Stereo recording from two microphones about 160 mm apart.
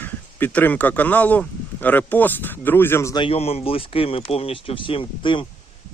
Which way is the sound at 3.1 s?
35° left (ahead or behind).